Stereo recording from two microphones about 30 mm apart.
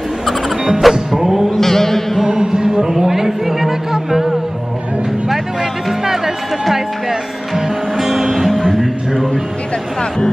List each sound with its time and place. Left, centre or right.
0.7 s music: centre
1.5 s mantra: centre
2.2 s a sound: right
3.1 s music: centre
6.6 s speech: centre
8.5 s music: left